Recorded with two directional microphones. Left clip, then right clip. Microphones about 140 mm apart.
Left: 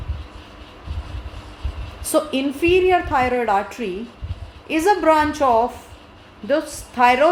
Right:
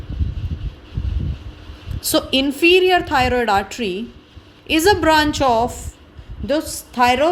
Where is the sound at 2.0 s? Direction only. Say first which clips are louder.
Right 2 dB; 50° right (ahead or behind).